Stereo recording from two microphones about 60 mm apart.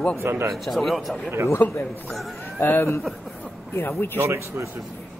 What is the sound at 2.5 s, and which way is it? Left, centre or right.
Speech, left.